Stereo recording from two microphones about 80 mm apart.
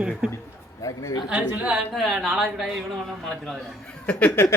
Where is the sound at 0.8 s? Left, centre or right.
Left.